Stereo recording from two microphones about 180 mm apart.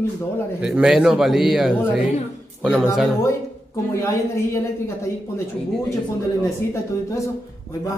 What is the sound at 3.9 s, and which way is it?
Speech, 15° left (ahead or behind).